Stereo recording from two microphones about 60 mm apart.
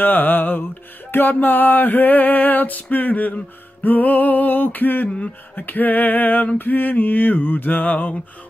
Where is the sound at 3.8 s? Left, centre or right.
Left.